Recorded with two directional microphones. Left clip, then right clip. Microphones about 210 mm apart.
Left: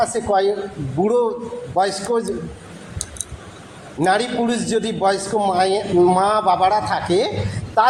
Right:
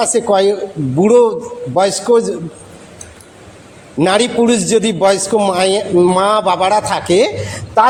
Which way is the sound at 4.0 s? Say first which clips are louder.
Right 6 dB; 55° right (ahead or behind).